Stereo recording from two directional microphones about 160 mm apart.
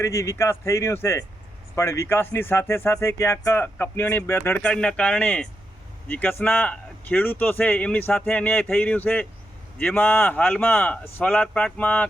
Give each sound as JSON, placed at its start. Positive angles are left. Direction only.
{"t": 0.0, "sound": "speech", "side_deg": 15}